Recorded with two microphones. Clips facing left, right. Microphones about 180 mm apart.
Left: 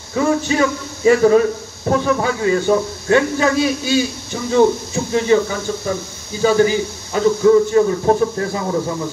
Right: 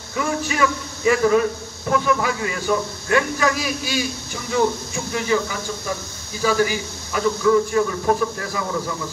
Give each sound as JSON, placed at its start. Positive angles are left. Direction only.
{"t": 0.1, "sound": "a man's voice", "side_deg": 30}
{"t": 6.4, "sound": "a man's voice", "side_deg": 30}